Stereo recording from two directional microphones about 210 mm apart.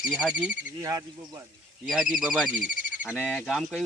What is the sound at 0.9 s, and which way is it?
Speech, 15° right (ahead or behind).